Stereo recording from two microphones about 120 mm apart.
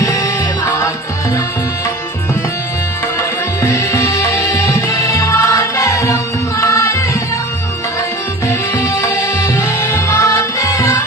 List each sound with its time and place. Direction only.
0.0 s music: 25° left (ahead or behind)
3.2 s music: 20° left (ahead or behind)
6.6 s tabla: 25° left (ahead or behind)
8.4 s music: 25° left (ahead or behind)